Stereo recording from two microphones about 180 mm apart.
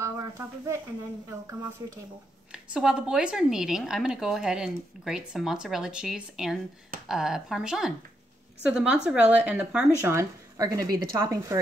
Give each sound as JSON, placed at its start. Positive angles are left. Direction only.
{"t": 1.3, "sound": "speech", "side_deg": -15}
{"t": 2.5, "sound": "a woman's voice", "side_deg": -5}